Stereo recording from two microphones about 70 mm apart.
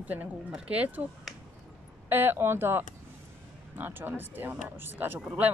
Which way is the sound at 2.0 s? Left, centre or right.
Right.